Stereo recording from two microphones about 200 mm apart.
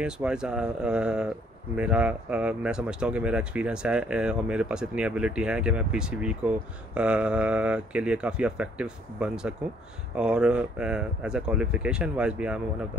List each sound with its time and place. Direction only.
0.0 s speech: 5° right (ahead or behind)